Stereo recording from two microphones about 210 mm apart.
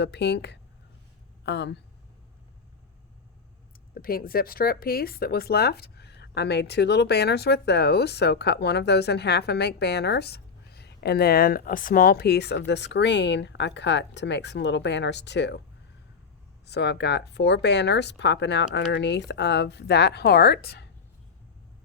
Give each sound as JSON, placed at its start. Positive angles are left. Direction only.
{"t": 0.0, "sound": "speech", "side_deg": 55}
{"t": 3.9, "sound": "speech", "side_deg": 45}
{"t": 16.6, "sound": "speech", "side_deg": 55}